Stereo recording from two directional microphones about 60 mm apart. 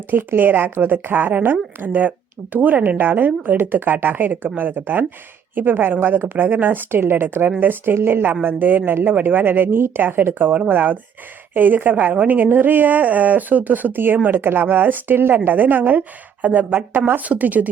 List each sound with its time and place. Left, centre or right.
0.1 s a woman's voice: right